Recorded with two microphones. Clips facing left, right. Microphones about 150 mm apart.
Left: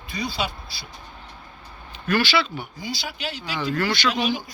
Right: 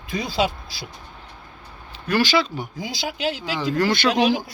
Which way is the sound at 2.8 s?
90° right.